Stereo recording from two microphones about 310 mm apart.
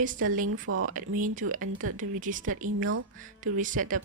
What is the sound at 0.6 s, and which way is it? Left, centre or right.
Speech, right.